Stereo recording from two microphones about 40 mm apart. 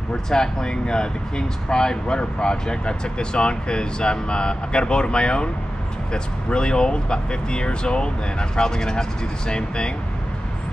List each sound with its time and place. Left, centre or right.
0.1 s speech: centre